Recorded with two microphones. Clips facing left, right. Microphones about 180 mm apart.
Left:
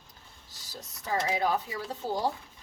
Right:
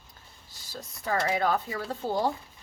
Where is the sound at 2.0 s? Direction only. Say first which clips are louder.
Right 2 dB; 15° left (ahead or behind).